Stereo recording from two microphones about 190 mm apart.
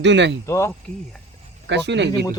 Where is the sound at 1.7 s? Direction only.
65° right (ahead or behind).